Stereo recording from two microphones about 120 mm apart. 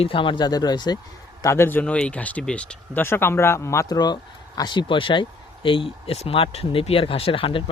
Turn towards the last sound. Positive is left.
turn(degrees=45)  # may be behind; listen again after turning